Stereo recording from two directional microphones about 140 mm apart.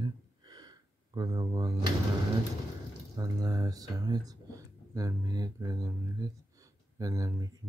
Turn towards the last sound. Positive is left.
turn(degrees=-25)  # may be behind; listen again after turning